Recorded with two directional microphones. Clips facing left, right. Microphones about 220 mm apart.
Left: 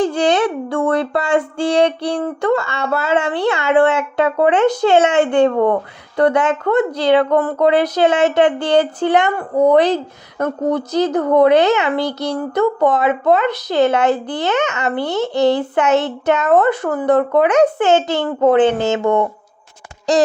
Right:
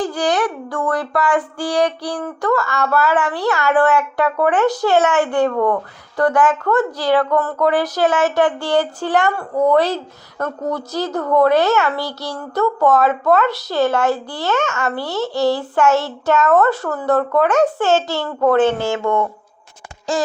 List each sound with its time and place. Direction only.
0.0 s speech: 25° left (ahead or behind)